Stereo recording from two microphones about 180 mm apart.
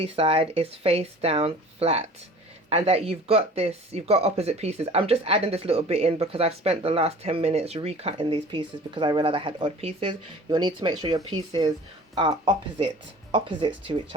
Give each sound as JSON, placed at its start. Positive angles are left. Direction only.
{"t": 0.0, "sound": "speech", "side_deg": -30}